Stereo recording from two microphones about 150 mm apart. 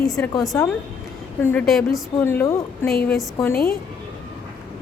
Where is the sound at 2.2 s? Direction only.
15° left (ahead or behind).